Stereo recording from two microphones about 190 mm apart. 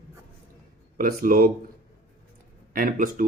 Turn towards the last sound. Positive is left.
turn(degrees=-50)  # may be behind; listen again after turning